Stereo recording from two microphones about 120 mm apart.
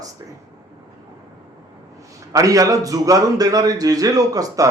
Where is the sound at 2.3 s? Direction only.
30° right (ahead or behind).